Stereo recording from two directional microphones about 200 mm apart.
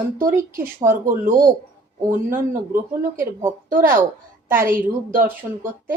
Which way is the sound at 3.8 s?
10° right (ahead or behind).